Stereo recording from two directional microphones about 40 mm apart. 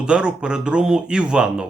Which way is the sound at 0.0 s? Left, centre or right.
Right.